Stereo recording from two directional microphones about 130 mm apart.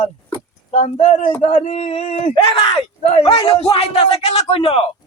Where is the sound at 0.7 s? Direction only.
60° left (ahead or behind).